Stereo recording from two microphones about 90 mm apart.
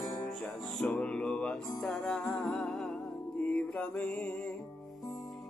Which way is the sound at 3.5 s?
10° left (ahead or behind).